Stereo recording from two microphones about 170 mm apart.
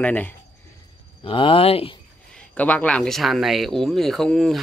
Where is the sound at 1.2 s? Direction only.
30° left (ahead or behind).